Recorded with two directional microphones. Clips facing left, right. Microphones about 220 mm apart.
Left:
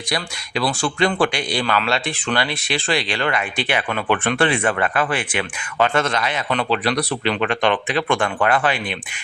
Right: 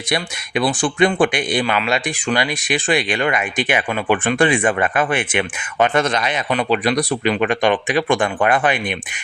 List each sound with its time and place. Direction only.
0.1 s speech: 20° right (ahead or behind)